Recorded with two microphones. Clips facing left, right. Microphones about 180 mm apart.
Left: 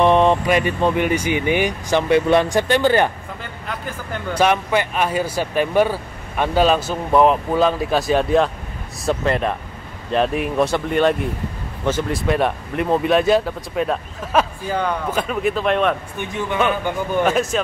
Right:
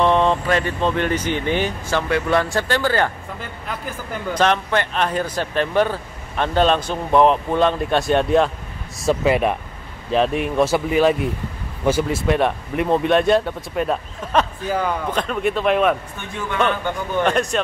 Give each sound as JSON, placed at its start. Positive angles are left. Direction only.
{"t": 0.0, "sound": "speech", "side_deg": 15}
{"t": 3.6, "sound": "speech", "side_deg": 0}
{"t": 4.3, "sound": "speech", "side_deg": 10}
{"t": 17.2, "sound": "speech", "side_deg": 5}